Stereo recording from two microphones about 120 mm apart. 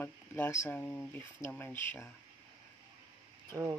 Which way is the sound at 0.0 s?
20° left (ahead or behind).